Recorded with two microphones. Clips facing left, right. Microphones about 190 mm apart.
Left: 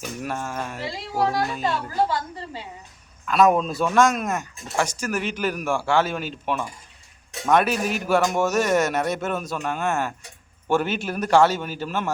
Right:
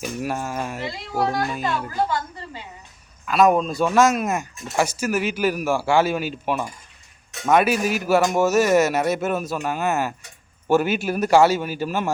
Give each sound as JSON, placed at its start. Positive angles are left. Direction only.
{"t": 0.0, "sound": "speech", "side_deg": -10}
{"t": 2.0, "sound": "a woman's voice", "side_deg": 35}
{"t": 3.2, "sound": "speech", "side_deg": 0}